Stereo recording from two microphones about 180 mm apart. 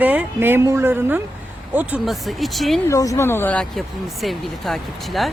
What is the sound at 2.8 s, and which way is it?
Speech, 20° left (ahead or behind).